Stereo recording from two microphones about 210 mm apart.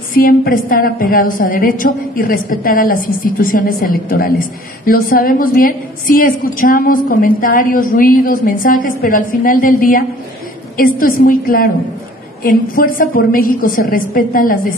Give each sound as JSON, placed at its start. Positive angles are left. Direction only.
{"t": 0.1, "sound": "a woman's voice", "side_deg": 45}